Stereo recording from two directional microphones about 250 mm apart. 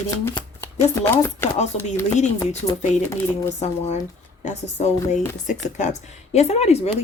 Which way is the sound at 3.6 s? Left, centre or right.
Left.